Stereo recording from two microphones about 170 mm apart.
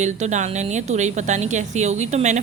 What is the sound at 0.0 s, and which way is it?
A woman's voice, 45° right (ahead or behind).